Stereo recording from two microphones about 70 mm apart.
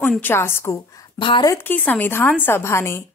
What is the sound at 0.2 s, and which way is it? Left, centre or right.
Speech, left.